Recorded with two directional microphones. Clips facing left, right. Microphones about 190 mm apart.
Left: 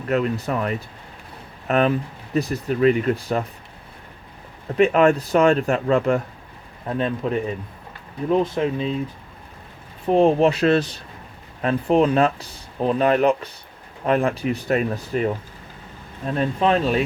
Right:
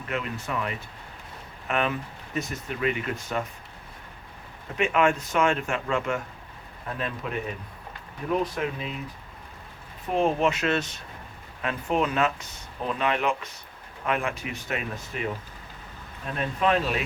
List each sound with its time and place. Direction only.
0.1 s speech: 40° left (ahead or behind)
4.8 s speech: 40° left (ahead or behind)
10.1 s speech: 30° left (ahead or behind)